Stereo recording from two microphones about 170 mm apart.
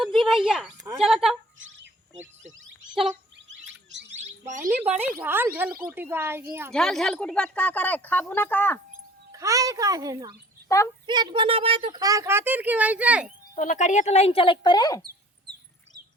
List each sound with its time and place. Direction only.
0.0 s a sound: centre (ahead or behind)
0.9 s speech: 5° right (ahead or behind)
4.2 s bird: 45° right (ahead or behind)
4.7 s speech: 10° right (ahead or behind)
6.7 s speech: centre (ahead or behind)
9.3 s speech: 20° right (ahead or behind)
13.6 s speech: 45° left (ahead or behind); by 15.0 s 25° left (ahead or behind)